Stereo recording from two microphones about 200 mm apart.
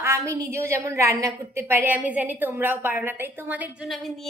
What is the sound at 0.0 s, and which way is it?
A woman's voice, 15° right (ahead or behind).